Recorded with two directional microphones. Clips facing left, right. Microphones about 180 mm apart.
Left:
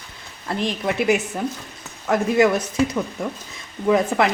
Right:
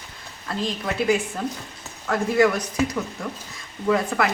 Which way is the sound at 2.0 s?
20° left (ahead or behind).